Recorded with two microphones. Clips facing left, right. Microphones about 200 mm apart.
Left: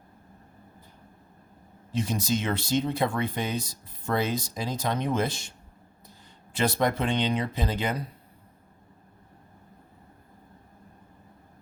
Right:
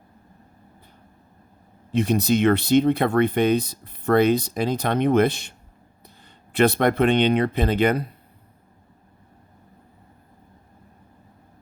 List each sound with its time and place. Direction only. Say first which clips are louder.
1.9 s speech: right 8 dB; 60° right (ahead or behind)